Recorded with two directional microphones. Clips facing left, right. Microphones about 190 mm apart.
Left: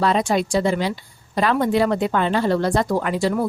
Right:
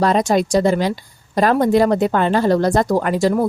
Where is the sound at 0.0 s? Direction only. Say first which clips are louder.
Right 4 dB; 40° right (ahead or behind).